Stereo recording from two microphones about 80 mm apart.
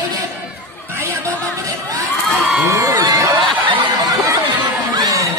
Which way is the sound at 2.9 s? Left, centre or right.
Right.